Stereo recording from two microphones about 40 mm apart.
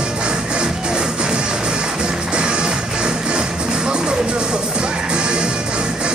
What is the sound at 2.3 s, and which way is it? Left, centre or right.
Music, right.